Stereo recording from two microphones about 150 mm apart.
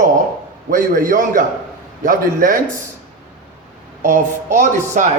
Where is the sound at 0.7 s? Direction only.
65° right (ahead or behind).